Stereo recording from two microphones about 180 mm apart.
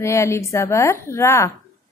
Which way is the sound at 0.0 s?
15° left (ahead or behind).